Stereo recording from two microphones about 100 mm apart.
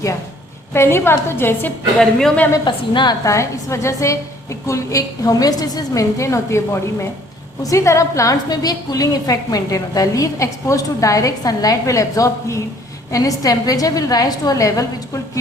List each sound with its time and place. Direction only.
0.7 s a woman's voice: 25° left (ahead or behind)
2.0 s speech: 5° left (ahead or behind)
2.6 s a woman's voice: 50° left (ahead or behind)
3.2 s a woman's voice: 30° left (ahead or behind)
7.6 s a woman's voice: 30° left (ahead or behind)